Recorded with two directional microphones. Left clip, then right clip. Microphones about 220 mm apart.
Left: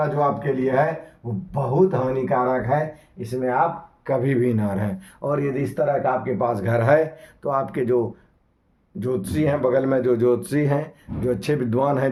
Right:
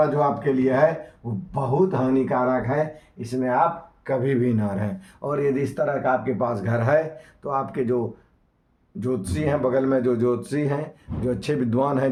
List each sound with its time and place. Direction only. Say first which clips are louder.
0.2 s speech: even; 20° left (ahead or behind)